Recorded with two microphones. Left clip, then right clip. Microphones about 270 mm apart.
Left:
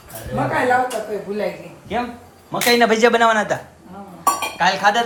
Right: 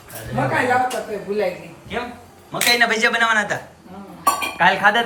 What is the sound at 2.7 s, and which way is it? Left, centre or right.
Speech, left.